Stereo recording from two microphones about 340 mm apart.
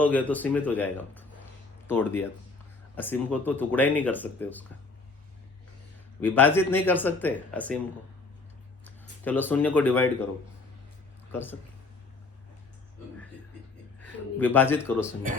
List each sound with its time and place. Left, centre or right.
0.0 s speech: centre
6.2 s speech: centre
8.8 s speech: centre
11.3 s speech: centre
14.0 s speech: centre
15.3 s speech: right